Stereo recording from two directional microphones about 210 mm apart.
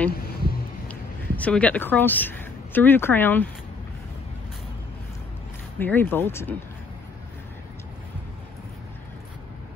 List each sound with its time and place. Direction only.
0.1 s a sound: 45° left (ahead or behind)
0.8 s speech: 5° left (ahead or behind)
5.8 s speech: 10° left (ahead or behind)